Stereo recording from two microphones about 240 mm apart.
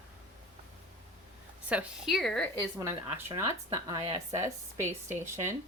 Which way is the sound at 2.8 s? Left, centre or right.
Centre.